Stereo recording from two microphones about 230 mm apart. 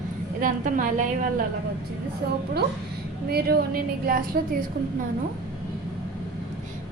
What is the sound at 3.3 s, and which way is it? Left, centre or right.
A woman's voice, right.